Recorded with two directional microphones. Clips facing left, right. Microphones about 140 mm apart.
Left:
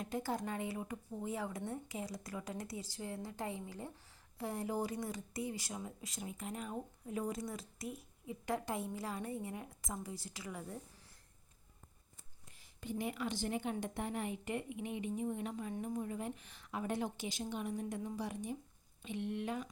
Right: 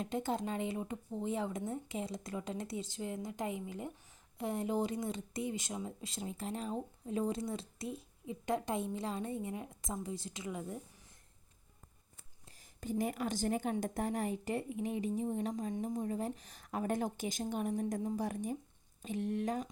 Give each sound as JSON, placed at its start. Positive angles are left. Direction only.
{"t": 0.0, "sound": "speech", "side_deg": -25}
{"t": 12.5, "sound": "a woman's voice", "side_deg": -40}